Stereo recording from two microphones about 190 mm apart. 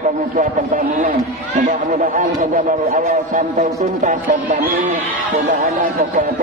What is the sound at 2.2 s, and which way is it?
A man's voice, 45° right (ahead or behind).